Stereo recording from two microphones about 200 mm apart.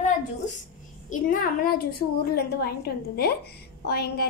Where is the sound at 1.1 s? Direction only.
45° left (ahead or behind).